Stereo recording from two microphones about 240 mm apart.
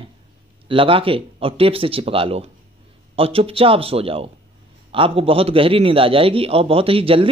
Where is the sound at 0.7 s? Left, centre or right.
Right.